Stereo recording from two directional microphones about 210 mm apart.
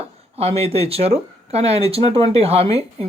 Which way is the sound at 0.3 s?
30° right (ahead or behind).